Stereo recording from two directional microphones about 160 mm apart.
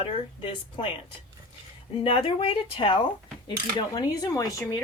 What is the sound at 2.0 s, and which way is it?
Speech, 35° left (ahead or behind).